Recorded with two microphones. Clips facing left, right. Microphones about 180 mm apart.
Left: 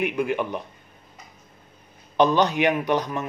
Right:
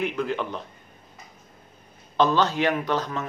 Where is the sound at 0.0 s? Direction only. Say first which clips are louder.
Left 3 dB; 15° left (ahead or behind).